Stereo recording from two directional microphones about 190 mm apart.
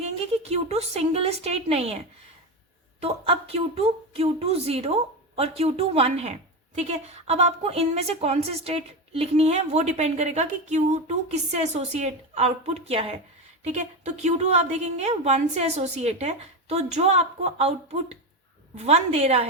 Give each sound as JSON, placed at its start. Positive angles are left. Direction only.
{"t": 0.0, "sound": "a woman's voice", "side_deg": -35}
{"t": 3.0, "sound": "a woman's voice", "side_deg": -30}
{"t": 18.8, "sound": "a woman's voice", "side_deg": -35}